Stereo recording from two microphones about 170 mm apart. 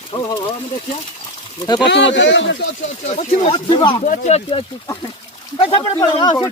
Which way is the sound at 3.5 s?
25° left (ahead or behind).